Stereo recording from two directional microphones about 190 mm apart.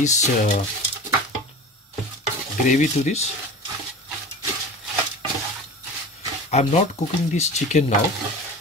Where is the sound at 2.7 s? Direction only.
40° left (ahead or behind).